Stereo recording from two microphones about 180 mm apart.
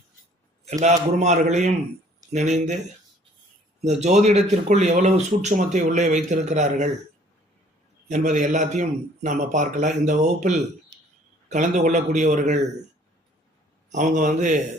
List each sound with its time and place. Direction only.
0.6 s speech: 40° right (ahead or behind)
3.8 s speech: 40° right (ahead or behind)
8.0 s a man's voice: 40° right (ahead or behind)
13.9 s a man's voice: 45° right (ahead or behind)